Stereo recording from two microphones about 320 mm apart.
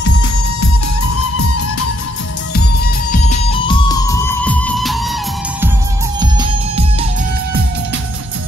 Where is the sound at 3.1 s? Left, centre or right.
Centre.